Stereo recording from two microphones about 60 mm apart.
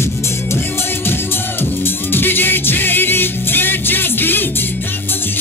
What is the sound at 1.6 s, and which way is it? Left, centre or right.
Music, left.